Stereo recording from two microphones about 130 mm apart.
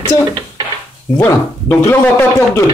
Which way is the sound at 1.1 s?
20° left (ahead or behind).